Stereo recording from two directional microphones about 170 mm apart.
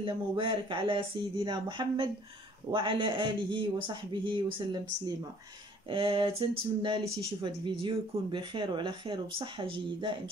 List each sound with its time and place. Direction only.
0.0 s speech: 30° right (ahead or behind)